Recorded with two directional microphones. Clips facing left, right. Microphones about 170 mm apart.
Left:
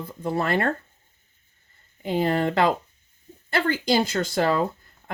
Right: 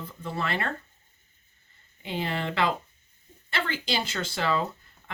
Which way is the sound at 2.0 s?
45° left (ahead or behind).